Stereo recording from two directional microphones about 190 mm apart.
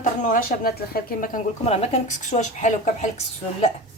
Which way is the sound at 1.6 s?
30° left (ahead or behind).